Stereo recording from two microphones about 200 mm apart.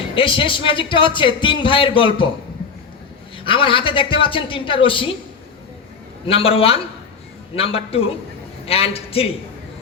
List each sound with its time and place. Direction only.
0.2 s speech: 25° left (ahead or behind)
3.4 s speech: 25° left (ahead or behind)
6.2 s speech: 30° left (ahead or behind)